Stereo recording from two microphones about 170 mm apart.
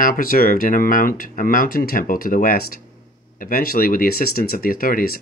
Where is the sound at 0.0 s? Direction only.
55° left (ahead or behind).